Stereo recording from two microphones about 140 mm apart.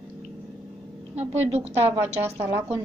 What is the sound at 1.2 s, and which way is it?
Speech, 50° right (ahead or behind).